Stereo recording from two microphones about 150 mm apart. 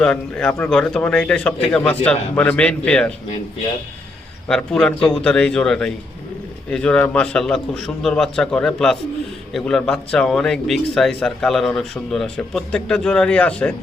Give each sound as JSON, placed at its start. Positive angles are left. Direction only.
{"t": 0.0, "sound": "a man's voice", "side_deg": 5}
{"t": 4.4, "sound": "a man's voice", "side_deg": 5}